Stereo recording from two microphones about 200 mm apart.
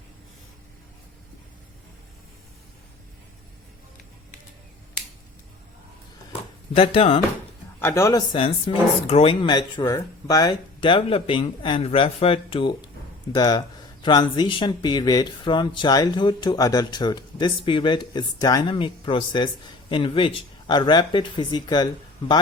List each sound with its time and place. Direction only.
6.7 s speech: 30° left (ahead or behind)
7.8 s speech: 10° left (ahead or behind)